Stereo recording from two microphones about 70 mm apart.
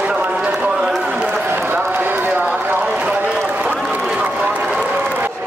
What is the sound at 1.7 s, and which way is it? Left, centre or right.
Run, right.